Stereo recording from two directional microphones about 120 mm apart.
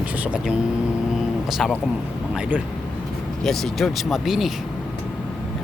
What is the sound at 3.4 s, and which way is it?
Speech, centre (ahead or behind).